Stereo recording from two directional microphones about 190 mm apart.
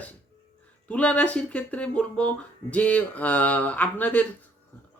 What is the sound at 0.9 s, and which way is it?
Speech, 5° left (ahead or behind).